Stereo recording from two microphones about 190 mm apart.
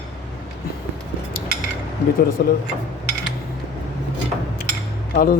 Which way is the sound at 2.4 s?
55° left (ahead or behind).